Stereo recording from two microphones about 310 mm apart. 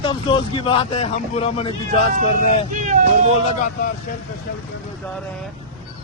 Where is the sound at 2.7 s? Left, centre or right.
Right.